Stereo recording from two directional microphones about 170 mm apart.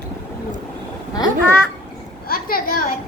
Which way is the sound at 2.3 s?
60° left (ahead or behind).